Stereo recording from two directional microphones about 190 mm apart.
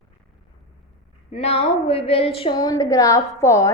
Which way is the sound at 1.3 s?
30° left (ahead or behind).